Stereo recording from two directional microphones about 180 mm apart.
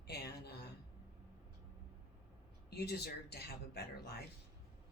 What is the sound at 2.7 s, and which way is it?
Speech, 60° left (ahead or behind).